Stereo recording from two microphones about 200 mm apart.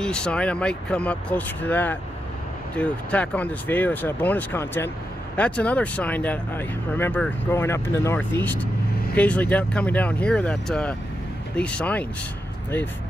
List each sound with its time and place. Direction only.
0.0 s speech: 5° left (ahead or behind)